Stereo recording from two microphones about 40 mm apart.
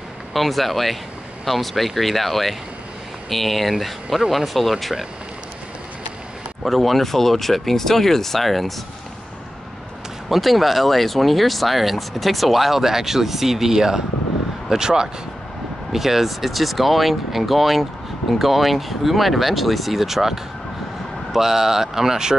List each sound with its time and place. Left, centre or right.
0.3 s speech: centre
6.6 s speech: centre
10.3 s speech: centre